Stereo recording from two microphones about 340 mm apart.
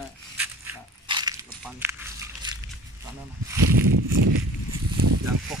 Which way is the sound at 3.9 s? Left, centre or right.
Right.